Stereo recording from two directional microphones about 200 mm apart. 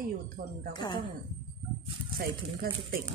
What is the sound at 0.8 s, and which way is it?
Speech, 20° left (ahead or behind).